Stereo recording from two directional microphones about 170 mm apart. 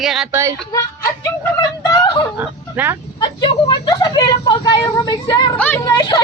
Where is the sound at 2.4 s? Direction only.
10° right (ahead or behind).